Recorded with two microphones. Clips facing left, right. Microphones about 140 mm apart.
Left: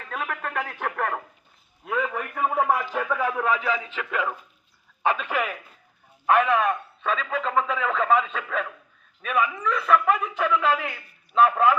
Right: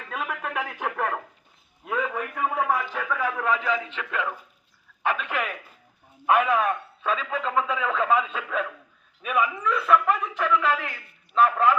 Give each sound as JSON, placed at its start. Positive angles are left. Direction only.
{"t": 0.1, "sound": "a sound", "side_deg": -5}
{"t": 1.8, "sound": "a man's voice", "side_deg": 0}
{"t": 6.2, "sound": "a man's voice", "side_deg": -10}